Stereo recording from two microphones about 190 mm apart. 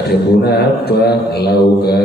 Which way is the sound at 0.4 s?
55° left (ahead or behind).